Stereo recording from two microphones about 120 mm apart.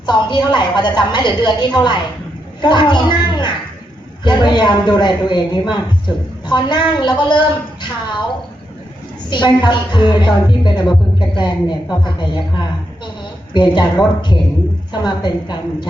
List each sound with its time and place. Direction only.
0.0 s a man's voice: 40° left (ahead or behind)
9.3 s a man's voice: 40° left (ahead or behind)
13.5 s a man's voice: 40° left (ahead or behind)